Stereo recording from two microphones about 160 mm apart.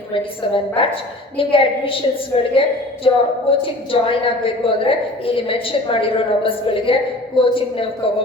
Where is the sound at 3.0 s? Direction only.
35° left (ahead or behind).